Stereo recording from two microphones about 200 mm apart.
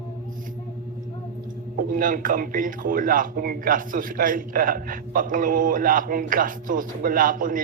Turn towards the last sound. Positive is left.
turn(degrees=-45)  # may be behind; listen again after turning